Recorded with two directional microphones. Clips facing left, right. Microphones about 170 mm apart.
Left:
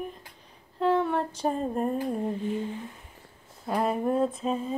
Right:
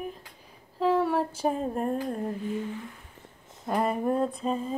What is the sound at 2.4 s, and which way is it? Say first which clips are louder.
Speech: left 1 dB; 25° left (ahead or behind).